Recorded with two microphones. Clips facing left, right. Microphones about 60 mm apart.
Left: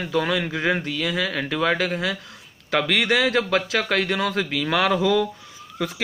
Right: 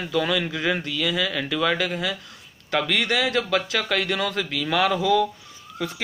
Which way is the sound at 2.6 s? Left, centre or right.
Left.